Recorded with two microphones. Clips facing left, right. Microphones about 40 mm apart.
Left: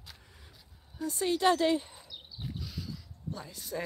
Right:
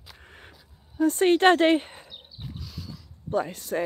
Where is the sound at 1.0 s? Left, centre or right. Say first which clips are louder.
Right 9 dB; right.